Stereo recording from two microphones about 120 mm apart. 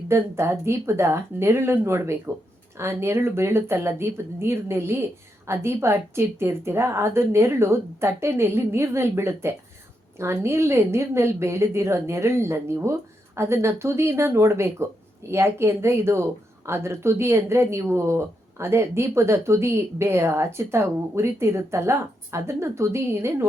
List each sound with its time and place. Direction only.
0.1 s speech: 20° right (ahead or behind)